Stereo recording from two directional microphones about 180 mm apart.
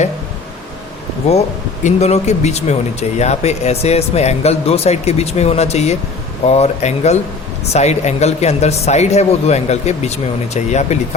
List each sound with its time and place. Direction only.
1.3 s speech: 35° left (ahead or behind)